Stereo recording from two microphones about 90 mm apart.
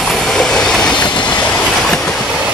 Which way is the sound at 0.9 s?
60° left (ahead or behind).